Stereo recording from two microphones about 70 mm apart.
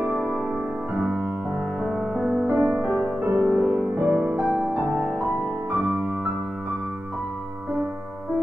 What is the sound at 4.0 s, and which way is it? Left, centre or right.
Music, right.